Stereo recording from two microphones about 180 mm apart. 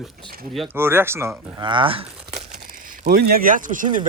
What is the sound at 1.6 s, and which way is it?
Speech, 25° right (ahead or behind).